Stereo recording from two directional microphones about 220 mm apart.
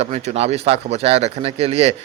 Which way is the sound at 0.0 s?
30° right (ahead or behind).